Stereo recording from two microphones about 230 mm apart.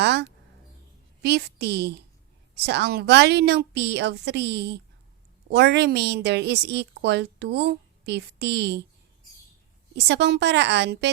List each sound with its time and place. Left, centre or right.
0.0 s a sound: right
1.2 s a woman's voice: right
9.9 s a woman's voice: right